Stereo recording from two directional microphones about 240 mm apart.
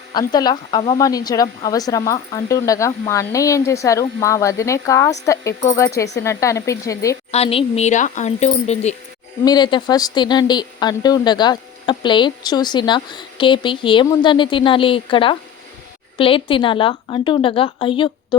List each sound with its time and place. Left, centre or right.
0.1 s speech: centre
7.3 s speech: left
9.4 s speech: centre